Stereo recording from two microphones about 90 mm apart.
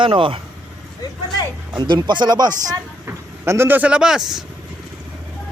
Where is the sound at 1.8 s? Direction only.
55° right (ahead or behind).